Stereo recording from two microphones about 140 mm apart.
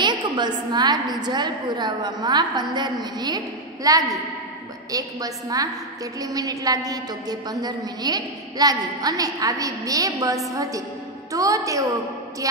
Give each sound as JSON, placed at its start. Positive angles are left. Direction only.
{"t": 0.0, "sound": "a woman's voice", "side_deg": -30}